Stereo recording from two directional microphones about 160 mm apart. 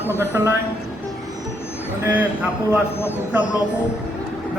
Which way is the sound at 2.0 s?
10° right (ahead or behind).